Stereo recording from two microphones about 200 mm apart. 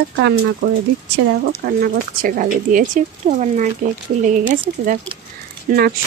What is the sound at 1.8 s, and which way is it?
Speech, 45° right (ahead or behind).